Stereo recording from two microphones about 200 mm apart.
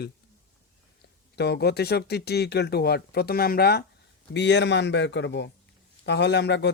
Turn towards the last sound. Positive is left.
turn(degrees=60)  # may be behind; listen again after turning